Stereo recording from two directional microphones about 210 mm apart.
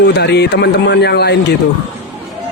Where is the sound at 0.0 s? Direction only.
50° left (ahead or behind).